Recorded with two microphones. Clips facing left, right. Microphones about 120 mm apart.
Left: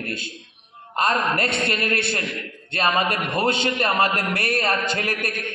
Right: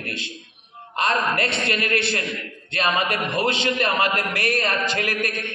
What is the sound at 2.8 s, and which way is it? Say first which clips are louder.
A man's voice: left 1 dB; 35° left (ahead or behind).